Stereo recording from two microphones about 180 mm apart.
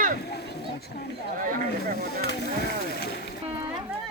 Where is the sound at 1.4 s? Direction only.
50° right (ahead or behind).